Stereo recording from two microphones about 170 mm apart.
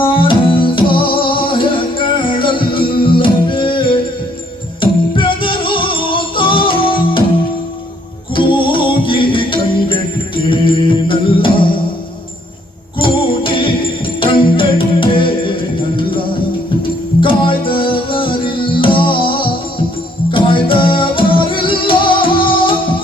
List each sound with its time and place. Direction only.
0.0 s music: 30° left (ahead or behind)
8.4 s music: 30° left (ahead or behind)
13.0 s music: 30° left (ahead or behind)